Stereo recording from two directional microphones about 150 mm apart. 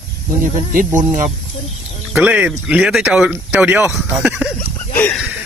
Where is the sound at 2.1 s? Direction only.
5° right (ahead or behind).